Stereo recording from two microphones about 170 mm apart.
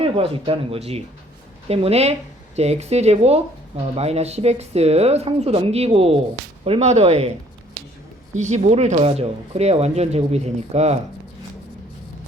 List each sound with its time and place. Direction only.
0.0 s speech: 35° right (ahead or behind)
8.4 s speech: 40° right (ahead or behind)